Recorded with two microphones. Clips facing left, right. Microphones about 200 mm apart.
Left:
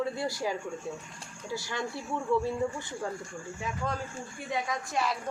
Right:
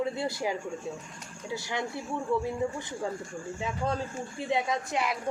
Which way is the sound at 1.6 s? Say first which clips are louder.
Right 2 dB; 20° right (ahead or behind).